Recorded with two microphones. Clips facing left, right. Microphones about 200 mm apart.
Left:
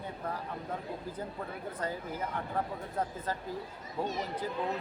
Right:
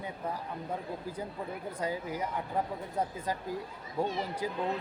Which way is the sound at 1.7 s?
10° right (ahead or behind).